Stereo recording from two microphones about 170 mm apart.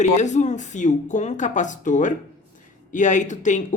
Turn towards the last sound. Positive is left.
turn(degrees=45)  # may be behind; listen again after turning